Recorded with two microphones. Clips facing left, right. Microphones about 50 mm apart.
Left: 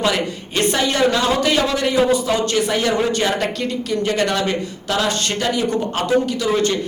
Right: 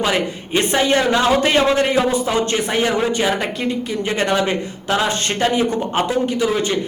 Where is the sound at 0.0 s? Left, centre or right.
Right.